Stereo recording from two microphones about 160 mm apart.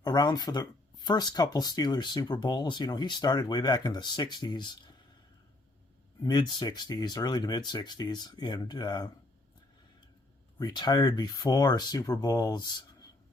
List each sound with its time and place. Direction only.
0.0 s speech: 25° left (ahead or behind)
6.2 s speech: 25° left (ahead or behind)
10.6 s speech: 25° left (ahead or behind)